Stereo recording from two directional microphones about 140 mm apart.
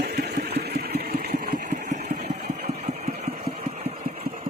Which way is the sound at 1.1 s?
75° right (ahead or behind).